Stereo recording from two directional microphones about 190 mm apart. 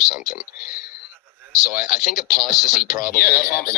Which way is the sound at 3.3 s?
10° right (ahead or behind).